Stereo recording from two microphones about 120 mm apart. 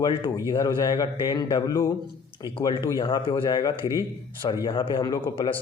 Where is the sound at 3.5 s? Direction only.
35° left (ahead or behind).